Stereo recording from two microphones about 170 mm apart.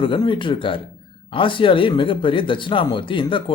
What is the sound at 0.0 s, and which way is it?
Speech, 30° left (ahead or behind).